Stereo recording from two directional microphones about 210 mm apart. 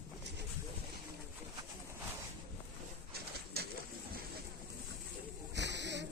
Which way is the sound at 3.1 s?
50° right (ahead or behind).